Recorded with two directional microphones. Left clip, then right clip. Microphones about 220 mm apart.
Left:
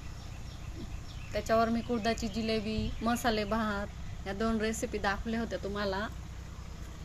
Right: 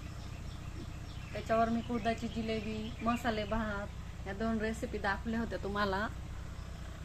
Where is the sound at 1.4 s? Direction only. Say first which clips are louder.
Left 3 dB; 45° left (ahead or behind); by 6.1 s 5° left (ahead or behind).